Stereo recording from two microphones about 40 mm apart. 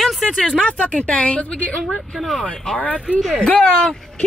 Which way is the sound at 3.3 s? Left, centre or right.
Left.